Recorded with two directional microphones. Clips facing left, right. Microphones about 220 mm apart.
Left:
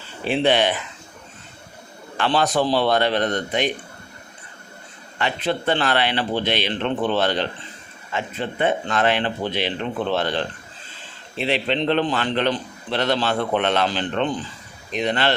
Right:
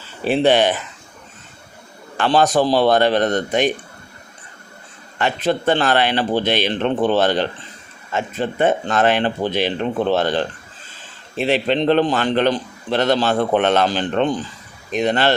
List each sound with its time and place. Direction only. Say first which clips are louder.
0.3 s a man's voice: right 4 dB; 45° right (ahead or behind)
2.1 s a man's voice: right 4 dB; 45° right (ahead or behind)
5.1 s a man's voice: right 4 dB; 45° right (ahead or behind)